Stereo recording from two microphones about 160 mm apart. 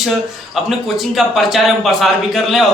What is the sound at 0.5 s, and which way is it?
A man's voice, centre (ahead or behind).